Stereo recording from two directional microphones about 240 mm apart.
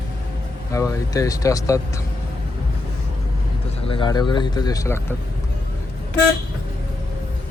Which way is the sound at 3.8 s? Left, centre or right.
Left.